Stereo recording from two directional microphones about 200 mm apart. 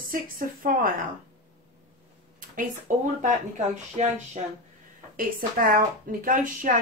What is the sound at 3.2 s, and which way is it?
A woman's voice, 35° right (ahead or behind).